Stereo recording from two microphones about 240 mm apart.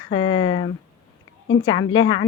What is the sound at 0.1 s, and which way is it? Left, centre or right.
Speech, left.